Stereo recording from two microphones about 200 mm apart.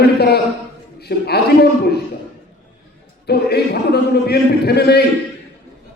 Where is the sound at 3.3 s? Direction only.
55° left (ahead or behind).